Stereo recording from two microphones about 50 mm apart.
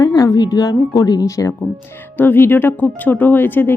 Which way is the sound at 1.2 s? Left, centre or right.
Left.